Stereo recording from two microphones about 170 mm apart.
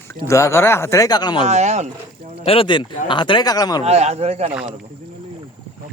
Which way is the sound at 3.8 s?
40° right (ahead or behind).